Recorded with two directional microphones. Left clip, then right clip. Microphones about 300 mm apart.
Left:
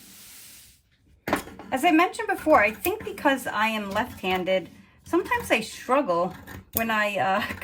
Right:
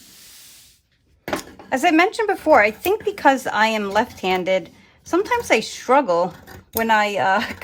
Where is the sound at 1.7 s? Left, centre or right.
Right.